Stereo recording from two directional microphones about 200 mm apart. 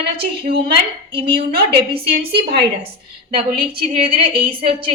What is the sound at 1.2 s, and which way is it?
A woman's voice, 50° right (ahead or behind).